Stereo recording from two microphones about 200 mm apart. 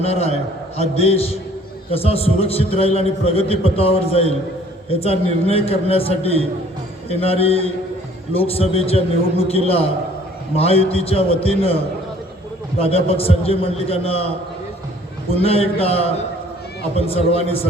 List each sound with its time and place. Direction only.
0.0 s a man's voice: 30° left (ahead or behind)
12.8 s a man's voice: 30° left (ahead or behind)